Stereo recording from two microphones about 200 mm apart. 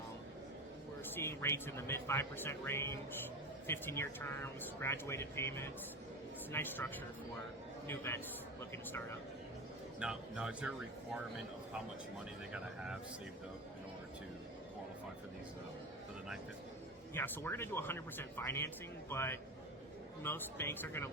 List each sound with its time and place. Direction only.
1.1 s speech: 10° left (ahead or behind)
10.0 s speech: 5° right (ahead or behind)
17.2 s speech: 10° left (ahead or behind)